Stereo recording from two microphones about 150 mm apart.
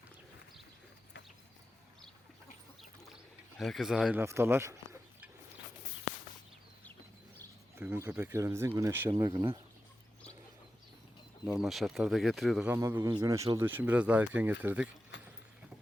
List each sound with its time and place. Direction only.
3.6 s speech: centre (ahead or behind); by 5.3 s 15° right (ahead or behind)
7.8 s speech: 15° right (ahead or behind)
9.0 s speech: 25° right (ahead or behind)
11.6 s speech: centre (ahead or behind)
12.6 s speech: 15° right (ahead or behind)